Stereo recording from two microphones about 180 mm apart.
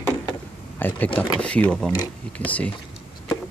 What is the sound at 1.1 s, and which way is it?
Speech, 30° left (ahead or behind).